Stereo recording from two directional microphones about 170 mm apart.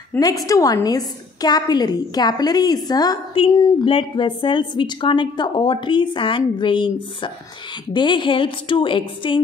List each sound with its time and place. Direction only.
0.2 s a woman's voice: 20° left (ahead or behind)